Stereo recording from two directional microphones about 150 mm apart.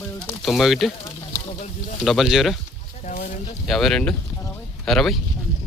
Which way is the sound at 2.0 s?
Centre (ahead or behind).